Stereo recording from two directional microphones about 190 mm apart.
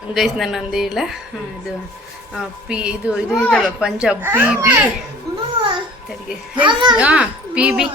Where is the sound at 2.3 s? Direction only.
5° right (ahead or behind).